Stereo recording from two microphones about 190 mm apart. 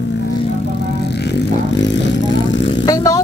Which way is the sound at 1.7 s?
70° left (ahead or behind).